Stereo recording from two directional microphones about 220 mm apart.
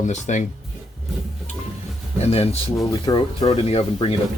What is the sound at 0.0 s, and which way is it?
Speech, 35° left (ahead or behind).